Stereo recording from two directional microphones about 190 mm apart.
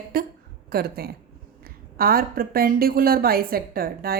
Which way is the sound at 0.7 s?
55° right (ahead or behind).